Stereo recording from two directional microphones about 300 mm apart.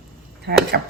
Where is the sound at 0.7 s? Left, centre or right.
Right.